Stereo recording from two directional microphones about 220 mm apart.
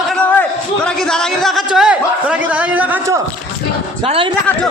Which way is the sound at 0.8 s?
5° left (ahead or behind).